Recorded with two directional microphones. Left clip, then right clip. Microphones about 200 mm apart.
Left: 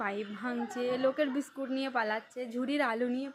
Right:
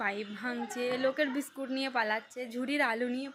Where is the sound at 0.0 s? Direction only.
10° left (ahead or behind).